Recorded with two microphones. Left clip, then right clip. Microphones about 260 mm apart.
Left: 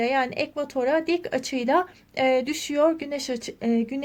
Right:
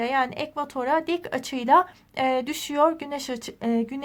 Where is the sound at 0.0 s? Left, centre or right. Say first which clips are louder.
Left 1 dB; centre.